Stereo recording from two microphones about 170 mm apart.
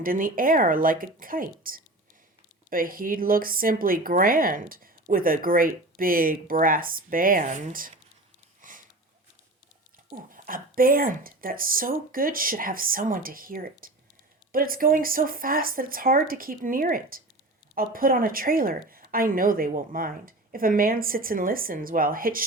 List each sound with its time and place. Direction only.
0.0 s speech: 55° right (ahead or behind)
8.6 s sniff: 50° right (ahead or behind)
10.1 s speech: 50° right (ahead or behind)